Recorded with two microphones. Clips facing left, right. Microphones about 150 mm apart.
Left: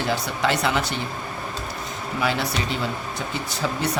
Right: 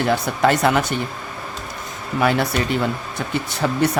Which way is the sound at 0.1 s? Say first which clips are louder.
Right 5 dB; 50° right (ahead or behind).